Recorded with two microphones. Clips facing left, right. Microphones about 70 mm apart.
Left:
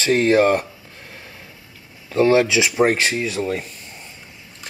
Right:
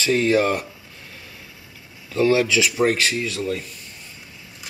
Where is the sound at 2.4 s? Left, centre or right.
Centre.